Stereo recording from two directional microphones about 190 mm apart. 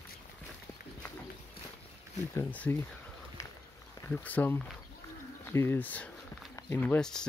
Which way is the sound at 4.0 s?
10° left (ahead or behind).